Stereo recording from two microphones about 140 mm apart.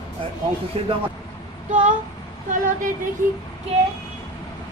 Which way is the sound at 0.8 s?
40° right (ahead or behind).